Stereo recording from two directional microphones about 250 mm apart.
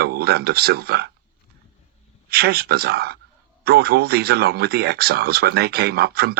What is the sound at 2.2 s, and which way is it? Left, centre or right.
Speech, right.